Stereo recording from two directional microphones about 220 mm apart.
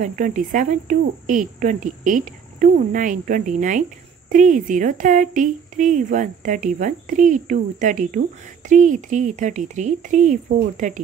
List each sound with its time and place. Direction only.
0.0 s speech: 35° right (ahead or behind)